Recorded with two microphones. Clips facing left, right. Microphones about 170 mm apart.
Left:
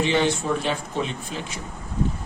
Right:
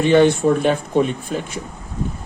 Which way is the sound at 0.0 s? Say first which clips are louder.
Right 9 dB; 55° right (ahead or behind).